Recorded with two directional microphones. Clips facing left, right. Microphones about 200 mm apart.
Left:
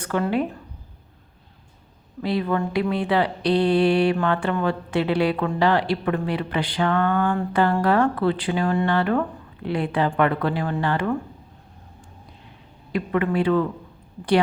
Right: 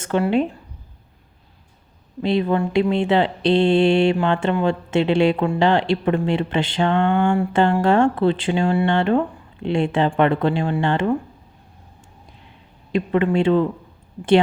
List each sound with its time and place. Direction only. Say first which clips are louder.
0.1 s mantra: right 4 dB; 25° right (ahead or behind)
2.2 s mantra: right 4 dB; 25° right (ahead or behind)
12.9 s mantra: right 4 dB; 25° right (ahead or behind)